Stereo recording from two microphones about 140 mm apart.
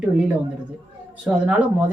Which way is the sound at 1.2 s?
10° right (ahead or behind).